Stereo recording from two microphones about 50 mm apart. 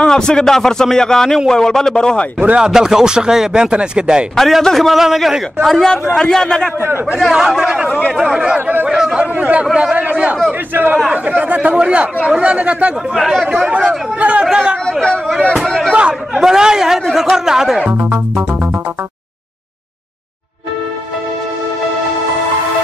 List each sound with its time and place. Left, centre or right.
0.0 s a man's voice: centre
2.6 s speech: centre
4.4 s a man's voice: centre
7.3 s speech: centre
8.5 s a man's voice: right
8.8 s speech: centre
10.7 s a man's voice: right
11.1 s speech: right
13.1 s speech: centre
13.7 s speech: right
14.9 s speech: centre
15.6 s a sound: centre
15.9 s speech: right
16.3 s speech: centre